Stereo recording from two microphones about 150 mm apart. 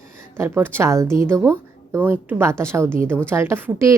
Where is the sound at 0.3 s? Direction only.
15° right (ahead or behind).